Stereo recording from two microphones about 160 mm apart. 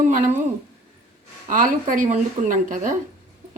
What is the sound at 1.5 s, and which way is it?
A woman's voice, 55° right (ahead or behind).